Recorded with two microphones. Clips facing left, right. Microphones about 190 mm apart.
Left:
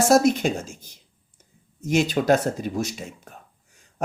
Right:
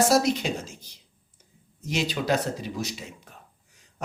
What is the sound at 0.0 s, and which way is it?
Speech, 50° left (ahead or behind).